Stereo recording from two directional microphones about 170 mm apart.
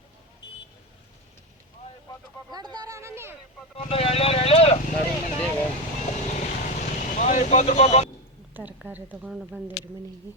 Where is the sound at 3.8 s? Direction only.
35° left (ahead or behind).